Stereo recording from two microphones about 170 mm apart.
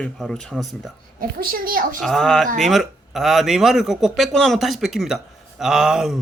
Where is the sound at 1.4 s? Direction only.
60° right (ahead or behind).